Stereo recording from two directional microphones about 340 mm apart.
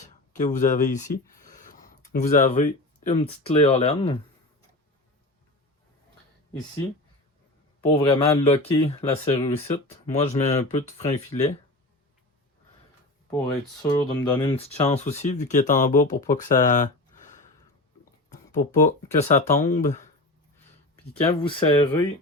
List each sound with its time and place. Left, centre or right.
0.0 s speech: left
7.9 s speech: centre
13.8 s speech: centre
18.6 s speech: left
21.2 s speech: centre